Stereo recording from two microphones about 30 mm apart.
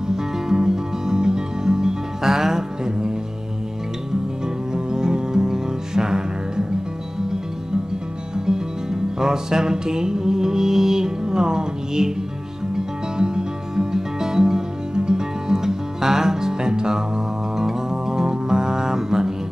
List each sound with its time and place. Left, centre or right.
0.1 s music: centre
4.7 s music: right
8.5 s music: centre